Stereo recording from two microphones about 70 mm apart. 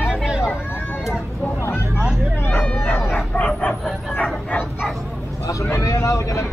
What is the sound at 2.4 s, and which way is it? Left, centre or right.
Bow-wow, left.